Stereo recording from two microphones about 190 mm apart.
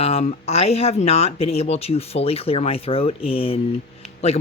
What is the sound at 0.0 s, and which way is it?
Speech, 35° left (ahead or behind).